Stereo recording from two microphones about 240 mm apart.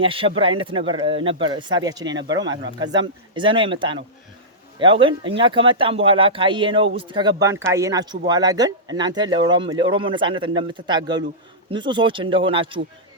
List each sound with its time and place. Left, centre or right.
0.0 s speech: right